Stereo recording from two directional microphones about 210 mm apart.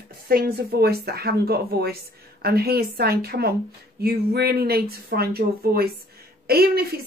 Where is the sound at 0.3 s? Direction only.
45° right (ahead or behind).